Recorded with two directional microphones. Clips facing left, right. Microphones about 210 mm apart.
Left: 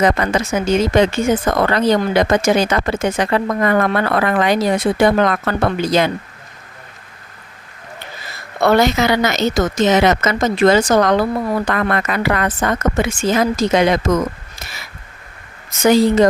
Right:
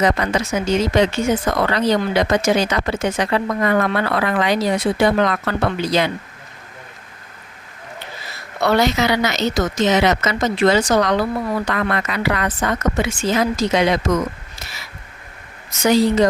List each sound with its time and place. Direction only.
0.0 s speech: 50° left (ahead or behind)
8.6 s speech: 50° left (ahead or behind)
15.7 s speech: 50° left (ahead or behind)